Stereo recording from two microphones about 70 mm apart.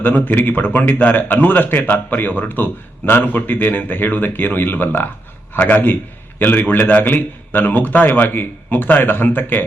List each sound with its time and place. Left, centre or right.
0.0 s a man's voice: left